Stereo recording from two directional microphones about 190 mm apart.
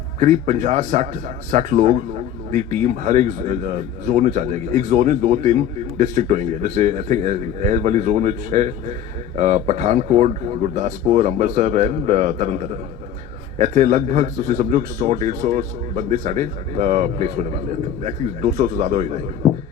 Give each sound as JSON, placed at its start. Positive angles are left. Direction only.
{"t": 0.2, "sound": "speech", "side_deg": -40}